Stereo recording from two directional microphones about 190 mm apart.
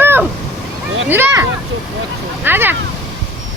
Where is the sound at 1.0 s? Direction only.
10° right (ahead or behind).